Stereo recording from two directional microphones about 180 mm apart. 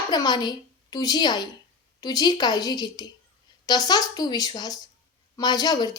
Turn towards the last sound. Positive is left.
turn(degrees=20)  # may be behind; listen again after turning